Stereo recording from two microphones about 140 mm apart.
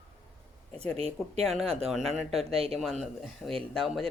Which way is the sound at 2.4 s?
45° right (ahead or behind).